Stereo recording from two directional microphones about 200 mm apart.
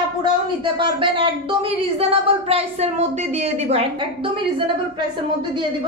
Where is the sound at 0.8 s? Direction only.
25° right (ahead or behind).